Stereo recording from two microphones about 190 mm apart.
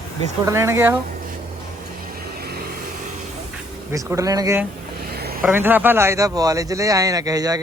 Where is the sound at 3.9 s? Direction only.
15° right (ahead or behind).